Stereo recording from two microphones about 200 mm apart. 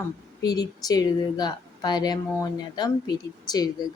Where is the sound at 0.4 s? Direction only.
20° left (ahead or behind).